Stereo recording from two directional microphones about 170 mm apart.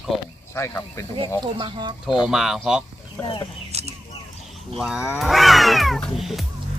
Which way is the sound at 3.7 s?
40° right (ahead or behind).